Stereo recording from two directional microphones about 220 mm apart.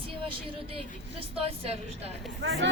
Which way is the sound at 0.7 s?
25° right (ahead or behind).